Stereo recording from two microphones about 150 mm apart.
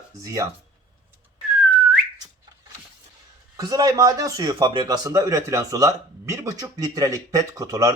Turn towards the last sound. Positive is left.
turn(degrees=-20)  # may be behind; listen again after turning